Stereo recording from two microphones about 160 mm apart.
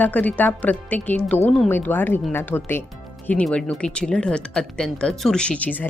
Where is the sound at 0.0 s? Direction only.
10° left (ahead or behind).